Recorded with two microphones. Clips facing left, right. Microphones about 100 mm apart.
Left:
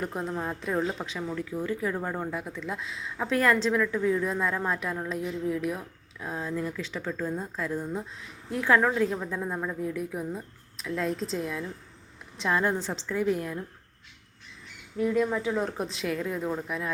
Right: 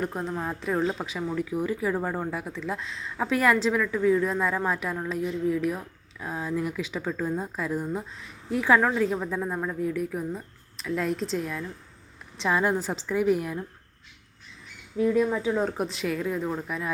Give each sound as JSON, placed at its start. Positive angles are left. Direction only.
{"t": 0.0, "sound": "a woman's voice", "side_deg": 0}
{"t": 15.1, "sound": "speech", "side_deg": -15}
{"t": 15.8, "sound": "a woman's voice", "side_deg": 0}